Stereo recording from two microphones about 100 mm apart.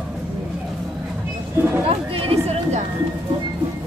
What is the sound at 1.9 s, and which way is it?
Speech, 75° right (ahead or behind).